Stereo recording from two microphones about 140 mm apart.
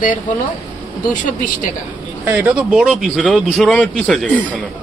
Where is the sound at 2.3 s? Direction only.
10° right (ahead or behind); by 4.4 s 5° left (ahead or behind).